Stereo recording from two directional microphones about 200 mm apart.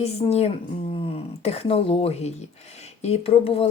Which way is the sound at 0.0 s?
30° left (ahead or behind).